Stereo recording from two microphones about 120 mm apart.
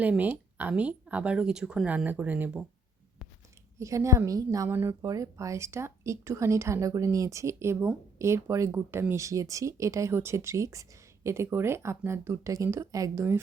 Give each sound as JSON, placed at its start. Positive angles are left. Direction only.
{"t": 0.0, "sound": "speech", "side_deg": -15}
{"t": 3.8, "sound": "speech", "side_deg": -25}